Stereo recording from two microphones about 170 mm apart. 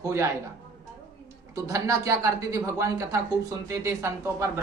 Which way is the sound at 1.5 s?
20° right (ahead or behind).